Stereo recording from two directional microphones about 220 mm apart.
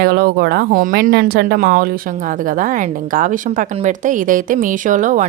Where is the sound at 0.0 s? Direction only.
45° right (ahead or behind).